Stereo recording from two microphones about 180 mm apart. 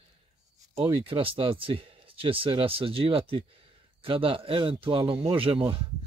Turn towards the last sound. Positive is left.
turn(degrees=-30)  # may be behind; listen again after turning